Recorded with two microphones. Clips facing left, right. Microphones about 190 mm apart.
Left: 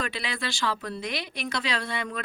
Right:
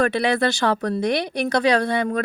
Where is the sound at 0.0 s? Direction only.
65° right (ahead or behind).